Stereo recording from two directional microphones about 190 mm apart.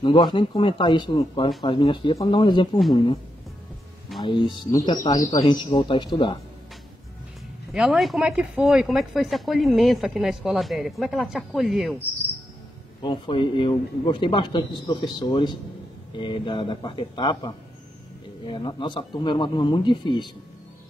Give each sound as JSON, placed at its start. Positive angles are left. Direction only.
{"t": 0.0, "sound": "a man's voice", "side_deg": 25}
{"t": 4.2, "sound": "a man's voice", "side_deg": 25}
{"t": 7.7, "sound": "speech", "side_deg": 0}
{"t": 13.0, "sound": "a man's voice", "side_deg": 25}